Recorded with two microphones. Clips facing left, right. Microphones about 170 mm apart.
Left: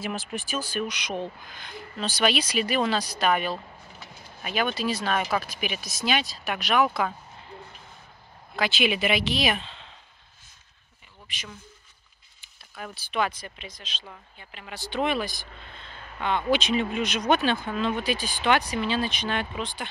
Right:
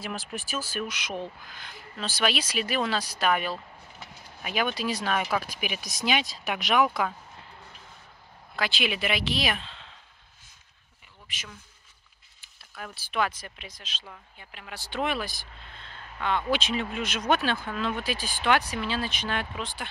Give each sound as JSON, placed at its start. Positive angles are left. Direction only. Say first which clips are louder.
{"t": 0.0, "sound": "speech", "louder": "left 3 dB", "side_deg": 0}
{"t": 8.5, "sound": "speech", "louder": "left 4 dB", "side_deg": 0}
{"t": 12.4, "sound": "speech", "louder": "left 2 dB", "side_deg": 0}